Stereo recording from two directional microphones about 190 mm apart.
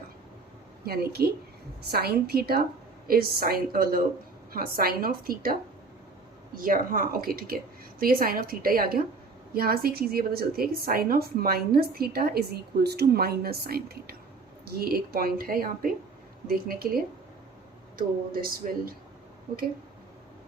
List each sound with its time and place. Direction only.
0.9 s a woman's voice: 55° right (ahead or behind)
6.6 s a woman's voice: 50° right (ahead or behind)